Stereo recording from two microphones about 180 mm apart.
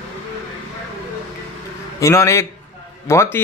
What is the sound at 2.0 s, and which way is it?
A man's voice, 15° left (ahead or behind).